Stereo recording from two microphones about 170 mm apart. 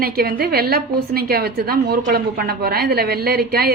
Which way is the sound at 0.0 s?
60° right (ahead or behind).